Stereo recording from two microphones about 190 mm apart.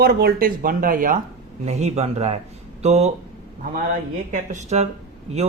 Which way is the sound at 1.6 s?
35° right (ahead or behind).